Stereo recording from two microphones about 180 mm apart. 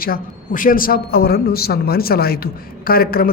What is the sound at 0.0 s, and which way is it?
Speech, 50° left (ahead or behind).